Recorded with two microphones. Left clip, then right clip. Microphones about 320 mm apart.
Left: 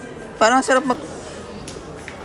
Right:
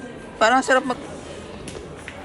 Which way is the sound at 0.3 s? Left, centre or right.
Centre.